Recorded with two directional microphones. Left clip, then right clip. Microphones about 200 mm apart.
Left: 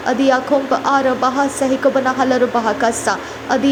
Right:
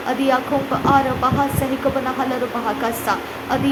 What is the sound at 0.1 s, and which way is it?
A woman's voice, 20° left (ahead or behind).